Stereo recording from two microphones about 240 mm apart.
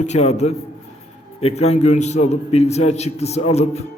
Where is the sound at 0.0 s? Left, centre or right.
Left.